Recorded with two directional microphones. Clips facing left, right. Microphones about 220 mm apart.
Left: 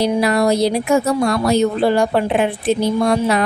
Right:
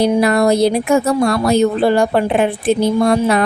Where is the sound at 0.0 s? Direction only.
50° right (ahead or behind).